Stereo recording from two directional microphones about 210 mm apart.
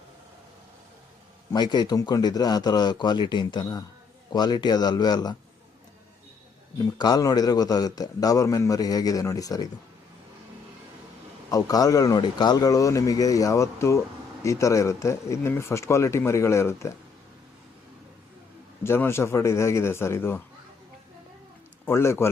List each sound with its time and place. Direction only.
1.5 s speech: 20° left (ahead or behind)
6.8 s a man's voice: 15° left (ahead or behind)
11.5 s a man's voice: 15° left (ahead or behind)
18.8 s a man's voice: 10° left (ahead or behind)
21.8 s a man's voice: 10° left (ahead or behind)